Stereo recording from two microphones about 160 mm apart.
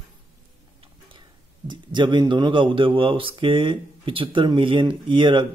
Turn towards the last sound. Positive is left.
turn(degrees=-30)  # may be behind; listen again after turning